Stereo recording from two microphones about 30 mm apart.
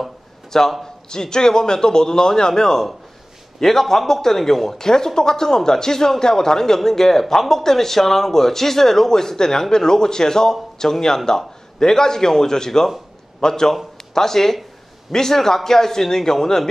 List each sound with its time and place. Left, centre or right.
0.5 s a man's voice: centre